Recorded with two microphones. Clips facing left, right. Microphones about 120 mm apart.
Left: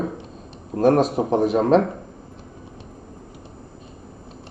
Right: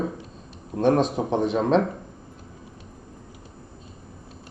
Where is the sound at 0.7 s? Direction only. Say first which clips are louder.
Left 3 dB; centre (ahead or behind).